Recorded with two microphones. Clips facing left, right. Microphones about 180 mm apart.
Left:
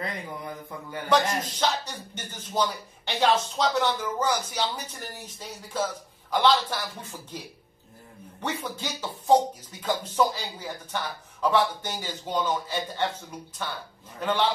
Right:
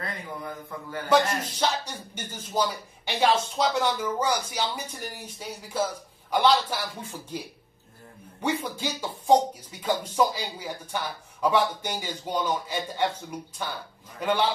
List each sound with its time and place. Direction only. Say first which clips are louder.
0.0 s a man's voice: left 1 dB; 20° left (ahead or behind)
1.4 s speech: even; 10° right (ahead or behind)
14.2 s speech: right 1 dB; 10° right (ahead or behind)